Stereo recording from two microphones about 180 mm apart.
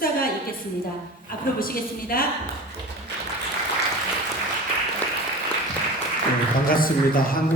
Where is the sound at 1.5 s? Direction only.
55° left (ahead or behind).